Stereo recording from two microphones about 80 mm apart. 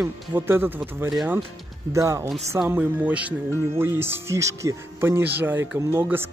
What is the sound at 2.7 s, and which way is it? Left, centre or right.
Speech, right.